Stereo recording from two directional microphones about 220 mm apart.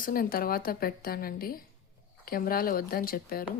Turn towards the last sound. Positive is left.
turn(degrees=40)  # may be behind; listen again after turning